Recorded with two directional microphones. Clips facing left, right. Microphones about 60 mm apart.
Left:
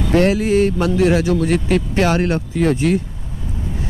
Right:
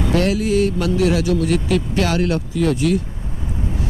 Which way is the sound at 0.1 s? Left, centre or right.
Left.